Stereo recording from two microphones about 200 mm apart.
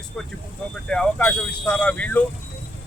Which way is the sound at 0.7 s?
5° left (ahead or behind).